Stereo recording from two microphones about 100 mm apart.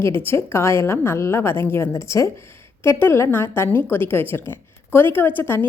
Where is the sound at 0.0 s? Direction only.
25° left (ahead or behind).